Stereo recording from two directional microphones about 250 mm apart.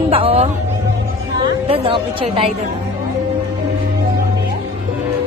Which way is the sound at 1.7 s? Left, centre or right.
Right.